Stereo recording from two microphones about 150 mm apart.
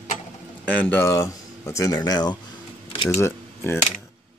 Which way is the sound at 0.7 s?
10° left (ahead or behind).